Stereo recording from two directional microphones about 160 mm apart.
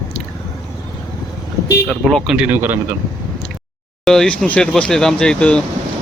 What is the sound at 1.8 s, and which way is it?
Speech, 5° left (ahead or behind).